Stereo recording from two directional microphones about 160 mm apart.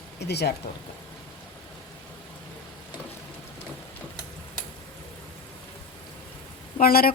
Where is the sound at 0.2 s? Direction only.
90° left.